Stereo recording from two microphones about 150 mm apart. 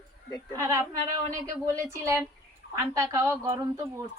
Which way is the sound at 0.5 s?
20° right (ahead or behind).